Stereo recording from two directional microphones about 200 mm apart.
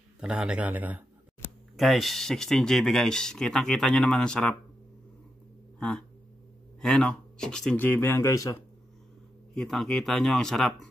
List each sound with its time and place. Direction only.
0.2 s speech: 5° right (ahead or behind)
5.8 s speech: 5° left (ahead or behind)
9.6 s speech: centre (ahead or behind)